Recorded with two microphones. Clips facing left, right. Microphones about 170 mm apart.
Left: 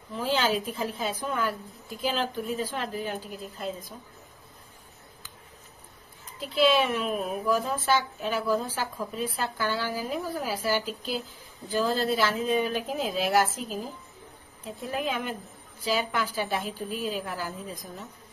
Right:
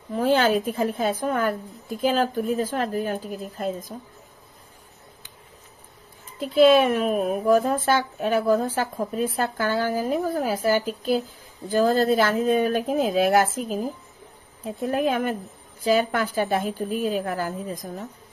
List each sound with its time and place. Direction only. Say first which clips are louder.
0.1 s a woman's voice: right 7 dB; 55° right (ahead or behind)
6.4 s a woman's voice: right 7 dB; 50° right (ahead or behind)
14.9 s a woman's voice: right 7 dB; 50° right (ahead or behind)